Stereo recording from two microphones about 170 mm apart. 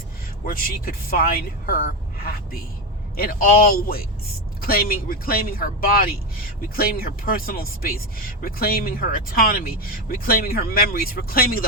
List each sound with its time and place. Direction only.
0.4 s speech: 55° left (ahead or behind)